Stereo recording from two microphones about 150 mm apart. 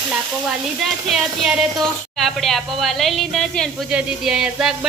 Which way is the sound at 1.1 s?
Centre (ahead or behind).